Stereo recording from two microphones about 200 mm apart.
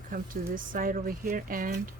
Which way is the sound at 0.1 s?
45° right (ahead or behind).